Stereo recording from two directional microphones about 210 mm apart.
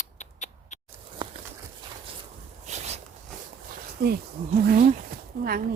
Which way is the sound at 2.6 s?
30° right (ahead or behind).